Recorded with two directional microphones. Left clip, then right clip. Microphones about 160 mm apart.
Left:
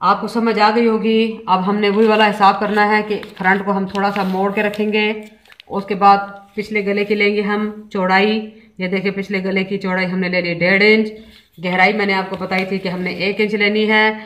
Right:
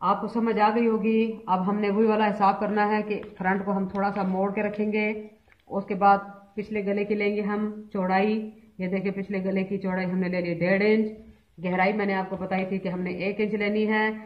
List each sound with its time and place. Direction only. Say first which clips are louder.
0.0 s a woman's voice: left 9 dB; 5° right (ahead or behind)